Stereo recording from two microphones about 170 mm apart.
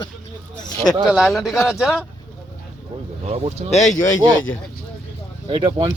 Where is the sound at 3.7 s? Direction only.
45° left (ahead or behind).